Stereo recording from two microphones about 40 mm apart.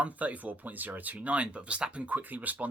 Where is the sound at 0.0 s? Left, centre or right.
Right.